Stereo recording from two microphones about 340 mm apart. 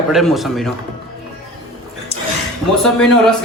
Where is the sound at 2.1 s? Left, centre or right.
Centre.